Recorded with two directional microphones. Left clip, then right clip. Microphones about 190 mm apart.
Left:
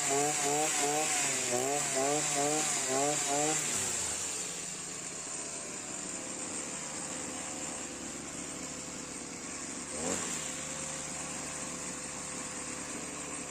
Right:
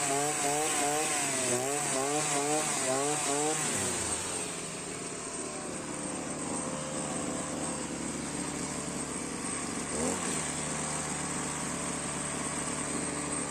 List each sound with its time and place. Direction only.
0.0 s chainsaw: 25° right (ahead or behind)